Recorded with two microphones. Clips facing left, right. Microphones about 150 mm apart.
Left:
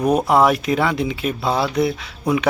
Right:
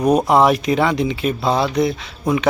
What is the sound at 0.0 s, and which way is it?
Speech, 5° left (ahead or behind).